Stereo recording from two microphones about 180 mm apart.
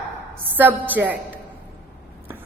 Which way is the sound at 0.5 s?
10° right (ahead or behind).